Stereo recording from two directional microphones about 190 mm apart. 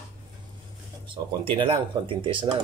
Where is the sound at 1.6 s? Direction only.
25° right (ahead or behind).